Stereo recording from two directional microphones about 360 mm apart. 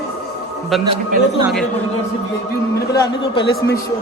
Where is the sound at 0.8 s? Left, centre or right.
Centre.